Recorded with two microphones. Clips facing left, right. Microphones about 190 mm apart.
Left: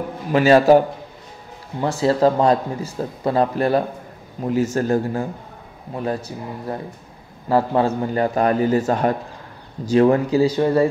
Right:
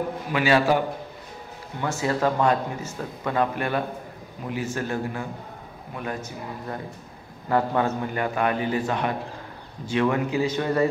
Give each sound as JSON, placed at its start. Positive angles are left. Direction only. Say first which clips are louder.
{"t": 0.3, "sound": "speech", "louder": "left 9 dB", "side_deg": 40}